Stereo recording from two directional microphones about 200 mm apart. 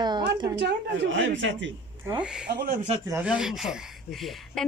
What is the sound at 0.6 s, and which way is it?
A woman's voice, 60° right (ahead or behind).